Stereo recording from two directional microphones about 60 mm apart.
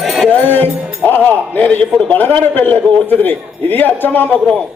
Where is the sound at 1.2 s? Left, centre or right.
Left.